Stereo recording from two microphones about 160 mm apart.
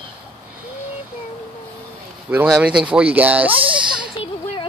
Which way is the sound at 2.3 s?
5° right (ahead or behind).